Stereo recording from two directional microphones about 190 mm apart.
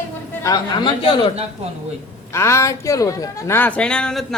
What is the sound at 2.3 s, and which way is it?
Speech, 15° left (ahead or behind).